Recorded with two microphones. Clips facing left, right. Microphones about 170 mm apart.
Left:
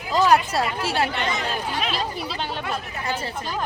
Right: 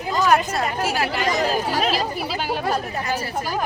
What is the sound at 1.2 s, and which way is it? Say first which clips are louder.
Speech: right 5 dB; 40° right (ahead or behind).